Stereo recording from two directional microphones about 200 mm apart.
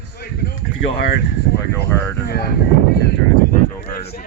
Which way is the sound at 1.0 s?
55° left (ahead or behind).